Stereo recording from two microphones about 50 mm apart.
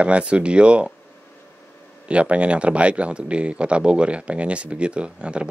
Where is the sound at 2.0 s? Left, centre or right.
Right.